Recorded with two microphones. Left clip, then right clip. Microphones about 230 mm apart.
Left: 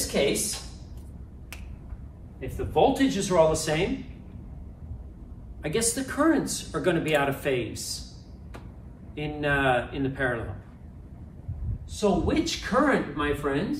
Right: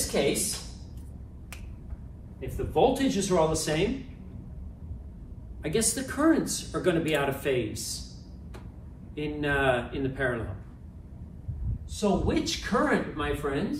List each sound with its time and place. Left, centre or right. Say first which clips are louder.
0.1 s speech: left 2 dB; centre
2.4 s speech: left 2 dB; centre
5.6 s speech: left 1 dB; centre
9.1 s speech: left 2 dB; centre
11.9 s speech: left 2 dB; centre